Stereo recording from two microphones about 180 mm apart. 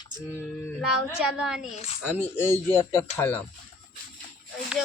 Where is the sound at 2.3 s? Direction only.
15° left (ahead or behind).